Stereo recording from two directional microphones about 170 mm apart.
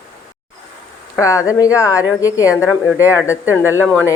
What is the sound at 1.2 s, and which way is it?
Speech, 20° left (ahead or behind).